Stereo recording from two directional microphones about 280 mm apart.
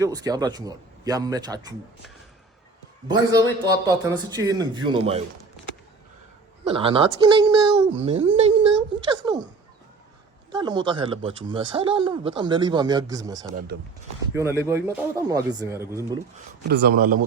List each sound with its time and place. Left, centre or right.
0.0 s speech: centre
3.8 s speech: centre
6.7 s a woman's voice: centre
10.5 s speech: centre
16.6 s speech: right